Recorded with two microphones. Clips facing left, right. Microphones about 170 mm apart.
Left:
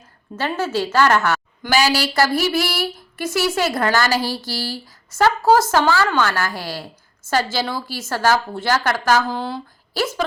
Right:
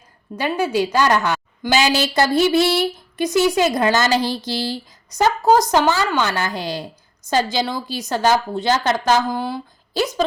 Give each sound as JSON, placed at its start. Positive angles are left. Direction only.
{"t": 0.3, "sound": "a woman's voice", "side_deg": -15}